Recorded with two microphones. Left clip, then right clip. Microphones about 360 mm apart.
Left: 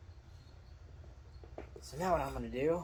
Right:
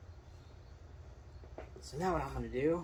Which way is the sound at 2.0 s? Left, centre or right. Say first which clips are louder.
Left 2 dB; centre.